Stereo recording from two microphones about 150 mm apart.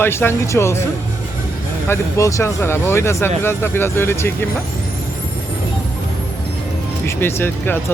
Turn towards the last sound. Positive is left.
turn(degrees=15)  # may be behind; listen again after turning